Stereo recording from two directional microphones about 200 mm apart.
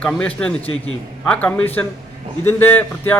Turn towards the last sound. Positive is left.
turn(degrees=10)  # may be behind; listen again after turning